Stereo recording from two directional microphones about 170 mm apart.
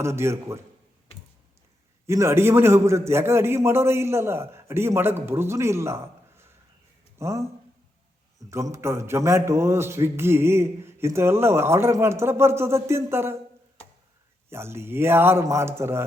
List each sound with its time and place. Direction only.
0.0 s a man's voice: 15° right (ahead or behind)
2.0 s a man's voice: 15° right (ahead or behind)
14.5 s a man's voice: 15° right (ahead or behind)